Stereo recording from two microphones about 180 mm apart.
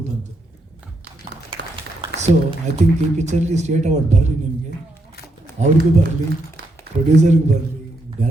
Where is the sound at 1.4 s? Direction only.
30° right (ahead or behind).